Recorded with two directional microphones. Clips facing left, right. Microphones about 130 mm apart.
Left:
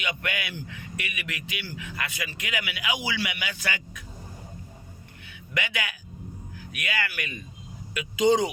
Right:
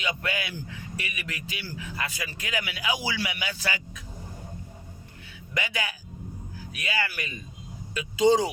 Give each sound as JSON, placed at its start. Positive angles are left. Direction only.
{"t": 0.0, "sound": "a man's voice", "side_deg": -30}
{"t": 5.3, "sound": "a man's voice", "side_deg": -35}